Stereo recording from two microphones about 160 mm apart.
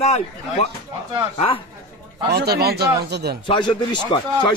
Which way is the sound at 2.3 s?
80° right.